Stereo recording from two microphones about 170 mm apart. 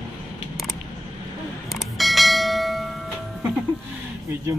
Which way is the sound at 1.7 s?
Centre (ahead or behind).